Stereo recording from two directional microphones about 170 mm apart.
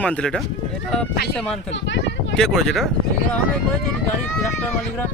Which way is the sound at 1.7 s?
90° left.